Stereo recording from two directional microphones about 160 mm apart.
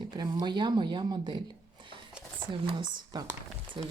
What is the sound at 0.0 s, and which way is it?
Speech, 25° right (ahead or behind).